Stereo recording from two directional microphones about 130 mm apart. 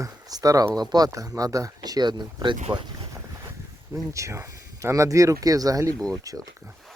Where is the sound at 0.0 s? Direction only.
30° right (ahead or behind).